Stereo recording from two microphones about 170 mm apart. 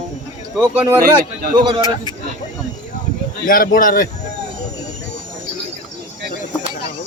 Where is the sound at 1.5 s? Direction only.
25° right (ahead or behind).